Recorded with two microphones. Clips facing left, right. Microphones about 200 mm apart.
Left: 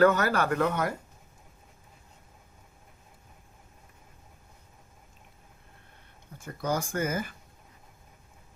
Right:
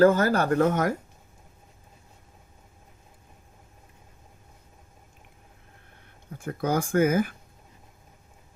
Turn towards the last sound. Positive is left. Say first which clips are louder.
# right 9 dB
turn(degrees=-55)  # may be behind; listen again after turning